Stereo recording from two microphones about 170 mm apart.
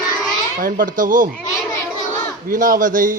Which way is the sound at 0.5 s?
55° right (ahead or behind).